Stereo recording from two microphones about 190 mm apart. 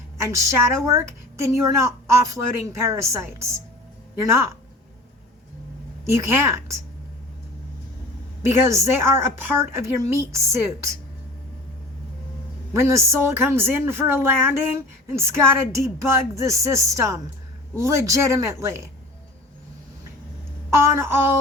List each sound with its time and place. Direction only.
0.2 s a woman's voice: 15° right (ahead or behind)
6.1 s a woman's voice: 15° right (ahead or behind)
8.4 s a woman's voice: 15° right (ahead or behind)
12.7 s a woman's voice: 15° right (ahead or behind)
20.7 s a woman's voice: 15° right (ahead or behind)